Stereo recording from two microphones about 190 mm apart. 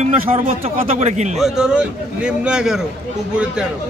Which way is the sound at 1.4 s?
5° right (ahead or behind).